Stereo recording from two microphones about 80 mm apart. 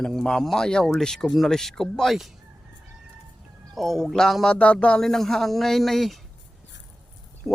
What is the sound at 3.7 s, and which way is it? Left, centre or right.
Speech, centre.